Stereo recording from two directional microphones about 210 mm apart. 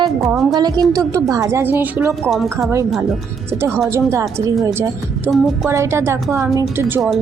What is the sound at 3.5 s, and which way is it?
A woman's voice, 10° right (ahead or behind).